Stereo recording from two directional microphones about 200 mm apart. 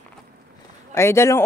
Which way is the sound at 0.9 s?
15° left (ahead or behind).